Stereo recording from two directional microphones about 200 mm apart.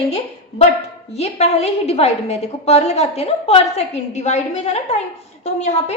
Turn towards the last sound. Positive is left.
turn(degrees=35)  # may be behind; listen again after turning